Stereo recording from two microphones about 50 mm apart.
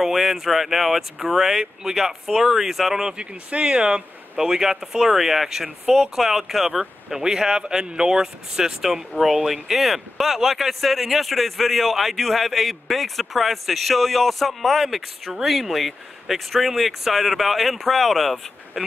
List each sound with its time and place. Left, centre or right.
0.0 s speech: centre
3.2 s speech: right; by 18.9 s centre